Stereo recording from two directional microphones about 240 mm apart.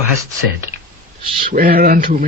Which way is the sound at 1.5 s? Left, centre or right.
Right.